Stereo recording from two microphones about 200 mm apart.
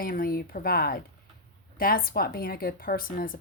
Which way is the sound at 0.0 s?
45° left (ahead or behind).